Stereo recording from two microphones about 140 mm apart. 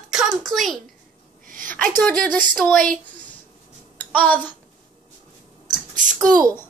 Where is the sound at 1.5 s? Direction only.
75° right (ahead or behind).